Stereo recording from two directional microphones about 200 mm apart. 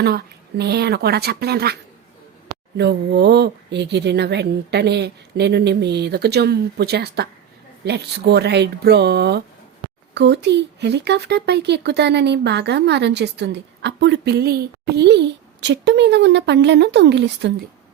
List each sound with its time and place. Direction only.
0.0 s speech: 55° right (ahead or behind)
2.7 s speech: 55° right (ahead or behind)